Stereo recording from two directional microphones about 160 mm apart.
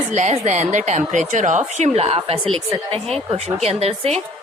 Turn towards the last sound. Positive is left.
turn(degrees=-40)  # may be behind; listen again after turning